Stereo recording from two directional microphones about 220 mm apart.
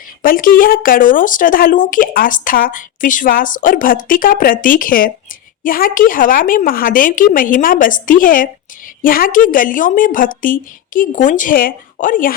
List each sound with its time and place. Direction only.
0.2 s speech: 40° left (ahead or behind)